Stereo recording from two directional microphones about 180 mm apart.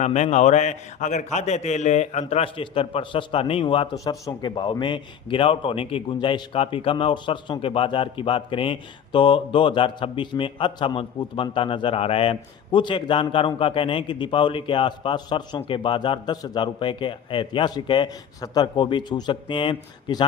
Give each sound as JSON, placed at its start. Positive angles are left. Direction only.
{"t": 0.0, "sound": "a man's voice", "side_deg": 40}